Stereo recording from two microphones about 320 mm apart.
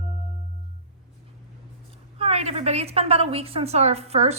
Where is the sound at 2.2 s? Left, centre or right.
Centre.